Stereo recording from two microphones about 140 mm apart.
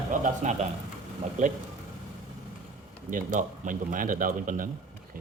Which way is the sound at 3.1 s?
70° right (ahead or behind).